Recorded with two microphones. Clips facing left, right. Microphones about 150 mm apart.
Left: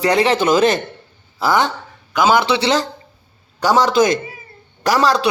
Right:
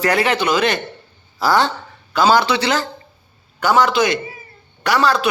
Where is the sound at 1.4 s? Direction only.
20° left (ahead or behind).